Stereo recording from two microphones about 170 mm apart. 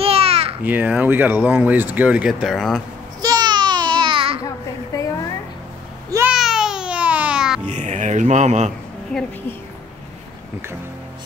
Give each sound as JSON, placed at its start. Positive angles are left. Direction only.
{"t": 0.0, "sound": "babbling", "side_deg": -35}
{"t": 0.7, "sound": "speech", "side_deg": -10}
{"t": 3.2, "sound": "babbling", "side_deg": -25}
{"t": 6.0, "sound": "babbling", "side_deg": -15}
{"t": 6.3, "sound": "babbling", "side_deg": 0}
{"t": 7.6, "sound": "music", "side_deg": -45}
{"t": 9.1, "sound": "a woman's voice", "side_deg": 5}